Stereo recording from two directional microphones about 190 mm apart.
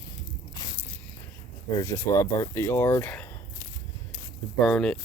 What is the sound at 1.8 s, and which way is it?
Speech, 15° left (ahead or behind).